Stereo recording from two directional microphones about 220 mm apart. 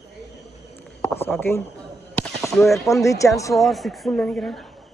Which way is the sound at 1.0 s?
10° left (ahead or behind).